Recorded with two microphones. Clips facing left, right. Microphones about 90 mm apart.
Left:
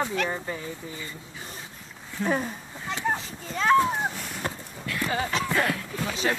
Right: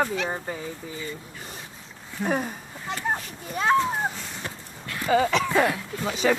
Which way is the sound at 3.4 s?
20° right (ahead or behind).